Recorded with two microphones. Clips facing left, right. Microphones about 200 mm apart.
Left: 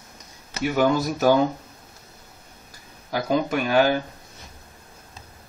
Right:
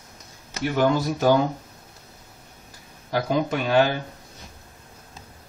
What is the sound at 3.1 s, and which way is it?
Speech, 10° left (ahead or behind).